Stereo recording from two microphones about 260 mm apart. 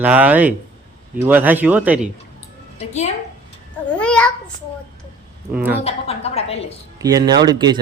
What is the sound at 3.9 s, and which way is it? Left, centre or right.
Speech, centre.